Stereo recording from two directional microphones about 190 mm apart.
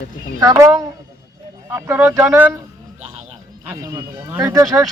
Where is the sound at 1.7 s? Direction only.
15° right (ahead or behind).